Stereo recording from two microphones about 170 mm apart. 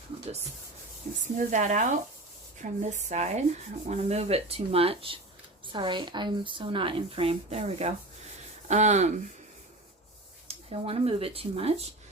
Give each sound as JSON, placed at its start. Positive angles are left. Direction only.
{"t": 1.4, "sound": "speech", "side_deg": -50}
{"t": 10.5, "sound": "speech", "side_deg": -35}